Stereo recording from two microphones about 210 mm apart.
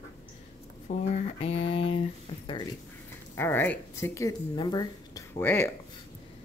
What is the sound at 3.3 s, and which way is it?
Speech, 10° left (ahead or behind).